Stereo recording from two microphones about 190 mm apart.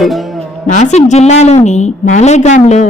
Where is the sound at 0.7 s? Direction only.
40° left (ahead or behind).